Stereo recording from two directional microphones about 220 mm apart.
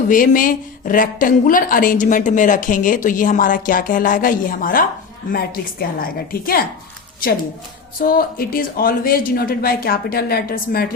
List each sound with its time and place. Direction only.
0.1 s a woman's voice: 40° left (ahead or behind)
8.0 s a woman's voice: 40° left (ahead or behind)